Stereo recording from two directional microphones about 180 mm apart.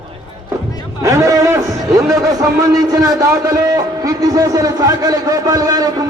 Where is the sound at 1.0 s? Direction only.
15° right (ahead or behind).